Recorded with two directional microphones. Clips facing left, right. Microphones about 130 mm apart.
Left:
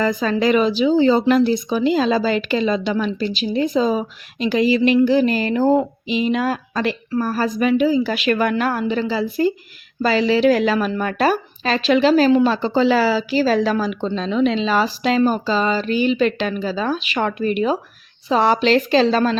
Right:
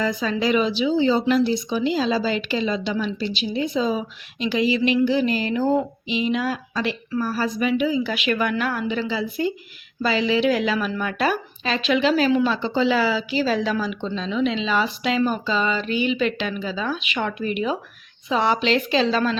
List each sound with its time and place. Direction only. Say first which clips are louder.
0.0 s speech: left 4 dB; 50° left (ahead or behind)